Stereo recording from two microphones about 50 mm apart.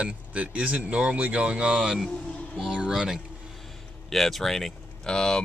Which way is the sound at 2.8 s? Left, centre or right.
Centre.